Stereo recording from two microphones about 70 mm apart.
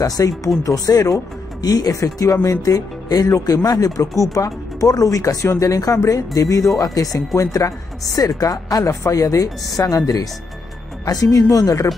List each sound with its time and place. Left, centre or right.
0.0 s a woman's voice: left
2.0 s a woman's voice: left